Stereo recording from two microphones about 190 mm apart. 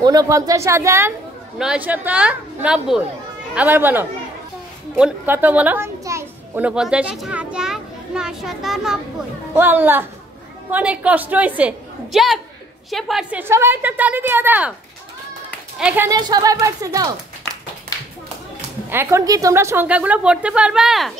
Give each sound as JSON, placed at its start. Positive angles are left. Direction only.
{"t": 0.0, "sound": "a woman's voice", "side_deg": -20}
{"t": 15.8, "sound": "a woman's voice", "side_deg": -10}
{"t": 16.1, "sound": "speech", "side_deg": -20}
{"t": 18.9, "sound": "a woman's voice", "side_deg": -15}